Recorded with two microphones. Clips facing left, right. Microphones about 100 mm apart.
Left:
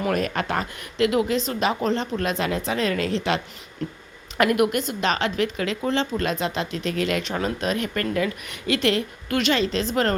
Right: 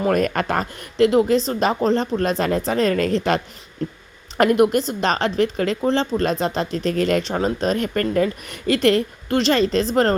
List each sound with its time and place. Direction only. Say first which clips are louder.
0.0 s speech: right 5 dB; 45° right (ahead or behind)
4.4 s speech: right 4 dB; 30° right (ahead or behind)